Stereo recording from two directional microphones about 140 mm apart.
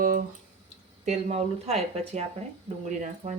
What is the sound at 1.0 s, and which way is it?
Speech, 50° right (ahead or behind).